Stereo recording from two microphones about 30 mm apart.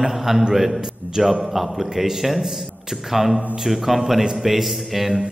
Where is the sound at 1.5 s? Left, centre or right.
Centre.